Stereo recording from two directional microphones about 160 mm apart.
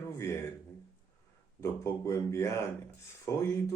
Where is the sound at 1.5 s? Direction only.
20° left (ahead or behind).